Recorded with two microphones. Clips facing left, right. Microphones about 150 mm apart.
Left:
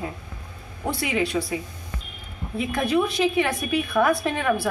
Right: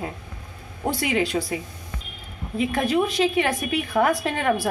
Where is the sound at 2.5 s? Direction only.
25° right (ahead or behind).